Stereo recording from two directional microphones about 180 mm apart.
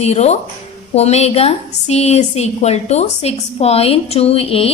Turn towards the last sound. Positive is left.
turn(degrees=35)  # may be behind; listen again after turning